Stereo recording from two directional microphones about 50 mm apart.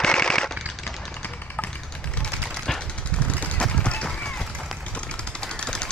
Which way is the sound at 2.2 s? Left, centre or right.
Centre.